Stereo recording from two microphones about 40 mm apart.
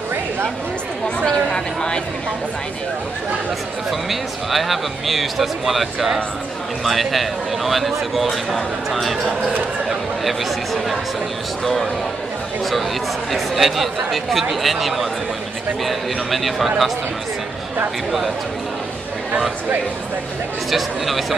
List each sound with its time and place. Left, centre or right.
1.5 s speech: centre
4.1 s speech: centre
13.3 s speech: centre
20.7 s speech: centre